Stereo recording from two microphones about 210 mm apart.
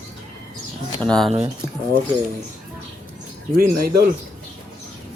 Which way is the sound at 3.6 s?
45° right (ahead or behind).